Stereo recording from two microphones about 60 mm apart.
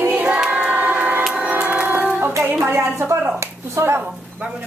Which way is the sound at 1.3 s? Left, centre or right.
Right.